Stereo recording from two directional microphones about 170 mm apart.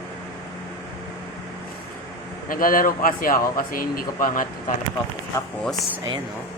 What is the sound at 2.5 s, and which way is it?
Speech, 55° left (ahead or behind).